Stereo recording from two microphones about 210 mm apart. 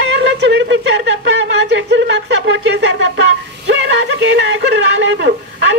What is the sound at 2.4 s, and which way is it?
Speech, 55° right (ahead or behind).